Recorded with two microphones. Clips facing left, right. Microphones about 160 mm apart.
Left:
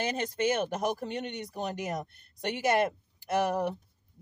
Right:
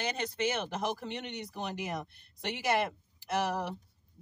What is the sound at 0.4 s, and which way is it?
Speech, 50° left (ahead or behind).